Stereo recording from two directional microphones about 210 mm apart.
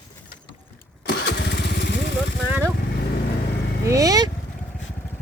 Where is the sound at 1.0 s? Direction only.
50° left (ahead or behind).